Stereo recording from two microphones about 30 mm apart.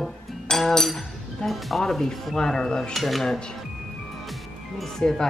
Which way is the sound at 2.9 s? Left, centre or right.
Centre.